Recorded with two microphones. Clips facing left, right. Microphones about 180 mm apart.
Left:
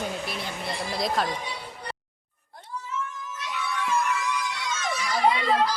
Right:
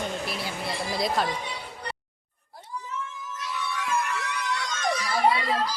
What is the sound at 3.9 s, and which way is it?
Music, 60° right (ahead or behind).